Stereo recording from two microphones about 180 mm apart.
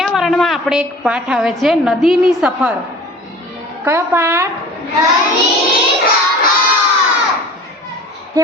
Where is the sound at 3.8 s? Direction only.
15° right (ahead or behind).